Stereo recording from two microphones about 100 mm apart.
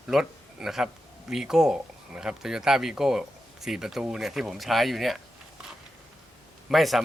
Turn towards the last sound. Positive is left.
turn(degrees=0)  # may be behind; listen again after turning